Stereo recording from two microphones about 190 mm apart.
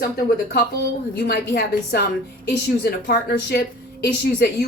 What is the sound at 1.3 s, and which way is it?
Speech, 55° left (ahead or behind).